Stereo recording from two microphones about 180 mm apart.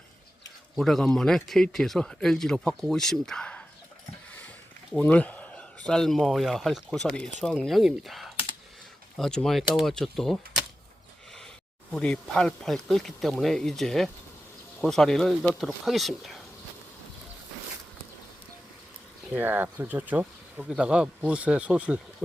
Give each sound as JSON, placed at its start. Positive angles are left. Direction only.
{"t": 0.8, "sound": "speech", "side_deg": 0}
{"t": 4.3, "sound": "a sound", "side_deg": 10}
{"t": 4.9, "sound": "speech", "side_deg": 10}
{"t": 11.9, "sound": "speech", "side_deg": 5}
{"t": 19.2, "sound": "speech", "side_deg": -10}